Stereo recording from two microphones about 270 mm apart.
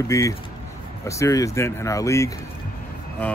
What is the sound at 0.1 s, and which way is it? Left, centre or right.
Speech, centre.